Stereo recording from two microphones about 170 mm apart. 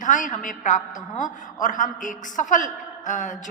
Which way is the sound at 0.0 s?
45° left (ahead or behind).